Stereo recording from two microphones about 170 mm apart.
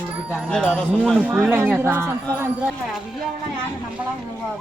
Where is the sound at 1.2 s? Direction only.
15° right (ahead or behind).